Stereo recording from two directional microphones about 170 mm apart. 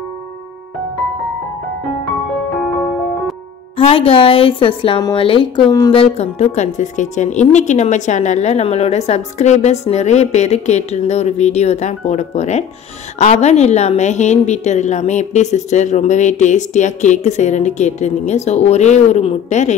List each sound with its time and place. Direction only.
3.7 s a woman's voice: 35° left (ahead or behind)
5.9 s a woman's voice: 40° left (ahead or behind)